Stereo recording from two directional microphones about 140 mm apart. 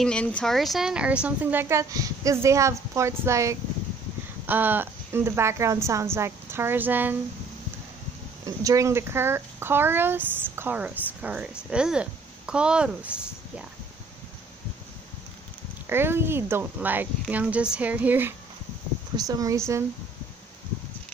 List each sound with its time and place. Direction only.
0.0 s speech: 10° left (ahead or behind); by 7.2 s 15° right (ahead or behind)
8.5 s speech: 25° right (ahead or behind); by 13.1 s 5° right (ahead or behind)
15.9 s speech: 15° right (ahead or behind)
19.1 s speech: 25° right (ahead or behind)